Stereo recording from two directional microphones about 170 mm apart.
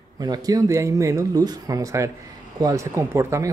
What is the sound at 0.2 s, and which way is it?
Speech, 20° right (ahead or behind).